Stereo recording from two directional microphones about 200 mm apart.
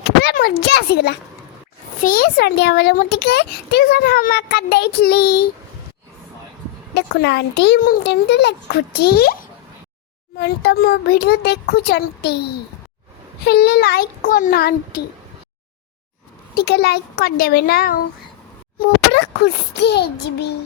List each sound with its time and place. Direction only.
0.0 s a sound: 55° left (ahead or behind)
2.0 s a child's voice: 45° left (ahead or behind)
6.9 s a child's voice: 55° left (ahead or behind)
16.6 s a child's voice: 55° left (ahead or behind)
19.1 s a child's voice: 60° left (ahead or behind)